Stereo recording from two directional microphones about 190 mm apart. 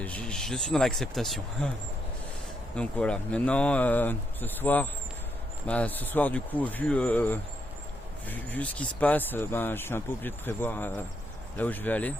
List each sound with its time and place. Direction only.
0.0 s speech: 5° left (ahead or behind)
2.7 s speech: 5° left (ahead or behind)